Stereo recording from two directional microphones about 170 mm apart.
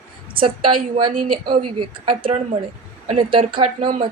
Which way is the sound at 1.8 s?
30° right (ahead or behind).